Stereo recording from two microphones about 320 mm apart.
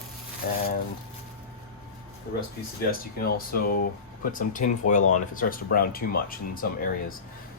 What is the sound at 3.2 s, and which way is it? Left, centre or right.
Speech, left.